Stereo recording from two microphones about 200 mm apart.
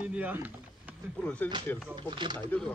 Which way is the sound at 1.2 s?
5° left (ahead or behind).